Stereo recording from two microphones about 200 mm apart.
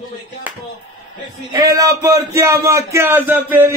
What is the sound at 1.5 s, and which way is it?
Speech, 15° right (ahead or behind).